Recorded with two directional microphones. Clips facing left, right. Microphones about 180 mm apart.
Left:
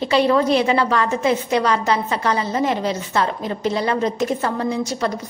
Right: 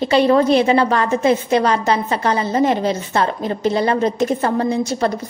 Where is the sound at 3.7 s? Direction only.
45° right (ahead or behind).